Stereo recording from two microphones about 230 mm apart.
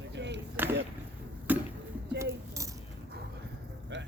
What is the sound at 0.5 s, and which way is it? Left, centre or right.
Speech, centre.